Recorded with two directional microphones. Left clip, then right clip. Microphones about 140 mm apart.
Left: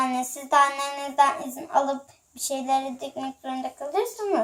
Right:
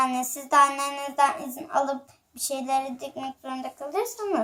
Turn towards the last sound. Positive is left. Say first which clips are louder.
# left 2 dB
turn(degrees=20)  # may be behind; listen again after turning